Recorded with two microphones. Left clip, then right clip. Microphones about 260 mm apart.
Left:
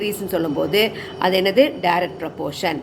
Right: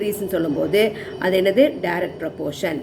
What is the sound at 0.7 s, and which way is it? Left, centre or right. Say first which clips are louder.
Speech: right 1 dB; left.